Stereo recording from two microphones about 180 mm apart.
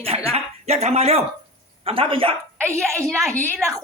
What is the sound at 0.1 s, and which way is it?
Speech, 35° right (ahead or behind).